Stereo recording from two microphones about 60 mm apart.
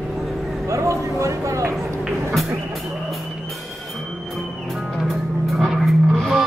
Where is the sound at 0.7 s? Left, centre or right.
Right.